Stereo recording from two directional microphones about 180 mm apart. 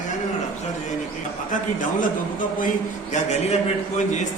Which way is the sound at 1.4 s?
45° left (ahead or behind).